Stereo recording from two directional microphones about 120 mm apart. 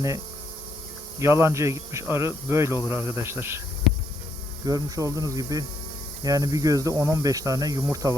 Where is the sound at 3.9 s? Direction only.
Centre (ahead or behind).